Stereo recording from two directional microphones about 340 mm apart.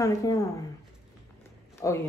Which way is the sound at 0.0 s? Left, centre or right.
Centre.